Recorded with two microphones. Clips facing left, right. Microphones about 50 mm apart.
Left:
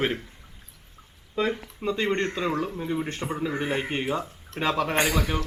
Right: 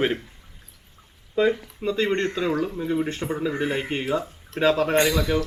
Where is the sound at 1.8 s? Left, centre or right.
Centre.